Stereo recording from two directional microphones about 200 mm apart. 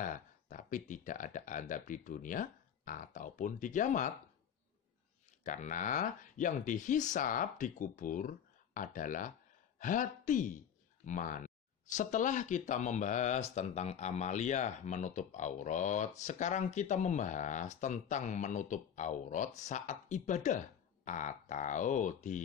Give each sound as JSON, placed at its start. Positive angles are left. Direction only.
{"t": 0.0, "sound": "speech", "side_deg": 40}
{"t": 5.4, "sound": "speech", "side_deg": 40}